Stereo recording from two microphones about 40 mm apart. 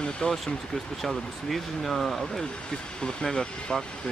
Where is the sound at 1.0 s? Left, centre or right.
Centre.